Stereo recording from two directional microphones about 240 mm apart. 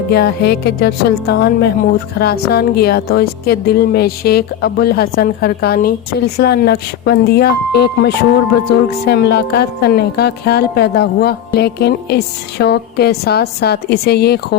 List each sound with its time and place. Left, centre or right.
0.1 s speech: left